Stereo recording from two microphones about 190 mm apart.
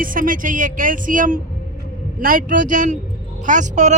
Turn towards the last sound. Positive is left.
turn(degrees=-40)  # may be behind; listen again after turning